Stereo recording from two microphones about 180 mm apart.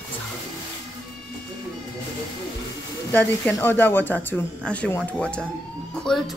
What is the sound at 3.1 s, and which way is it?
A man's voice, 10° left (ahead or behind).